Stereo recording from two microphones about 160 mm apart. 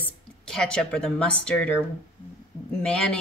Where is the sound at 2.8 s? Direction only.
5° left (ahead or behind).